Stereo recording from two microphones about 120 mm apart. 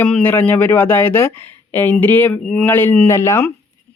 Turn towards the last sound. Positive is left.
turn(degrees=25)  # may be behind; listen again after turning